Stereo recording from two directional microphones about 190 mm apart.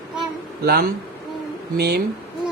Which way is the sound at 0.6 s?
55° right (ahead or behind).